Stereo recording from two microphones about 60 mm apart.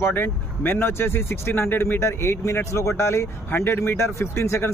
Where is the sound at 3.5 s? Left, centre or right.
Left.